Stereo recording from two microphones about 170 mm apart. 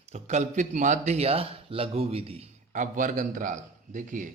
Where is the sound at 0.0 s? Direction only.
40° right (ahead or behind).